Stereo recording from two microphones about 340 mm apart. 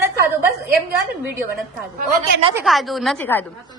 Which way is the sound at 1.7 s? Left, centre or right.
Centre.